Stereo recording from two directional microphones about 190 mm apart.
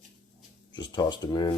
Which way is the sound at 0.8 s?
20° left (ahead or behind).